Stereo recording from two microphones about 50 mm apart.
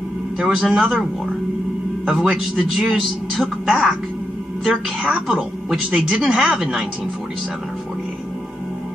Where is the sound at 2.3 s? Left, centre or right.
Right.